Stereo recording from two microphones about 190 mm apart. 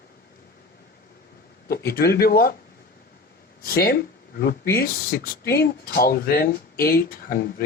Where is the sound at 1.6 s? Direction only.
55° left (ahead or behind).